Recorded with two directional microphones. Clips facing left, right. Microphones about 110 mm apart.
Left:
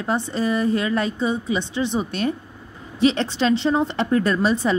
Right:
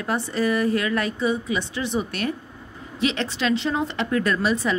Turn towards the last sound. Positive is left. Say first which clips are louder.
# left 3 dB
turn(degrees=30)  # may be behind; listen again after turning